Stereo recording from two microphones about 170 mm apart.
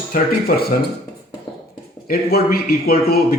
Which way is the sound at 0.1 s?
60° left (ahead or behind).